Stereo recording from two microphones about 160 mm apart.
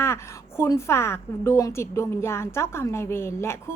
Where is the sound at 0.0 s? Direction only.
15° left (ahead or behind).